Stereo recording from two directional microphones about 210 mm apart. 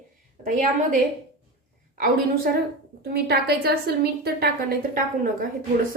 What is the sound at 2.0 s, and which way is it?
A woman's voice, 45° right (ahead or behind).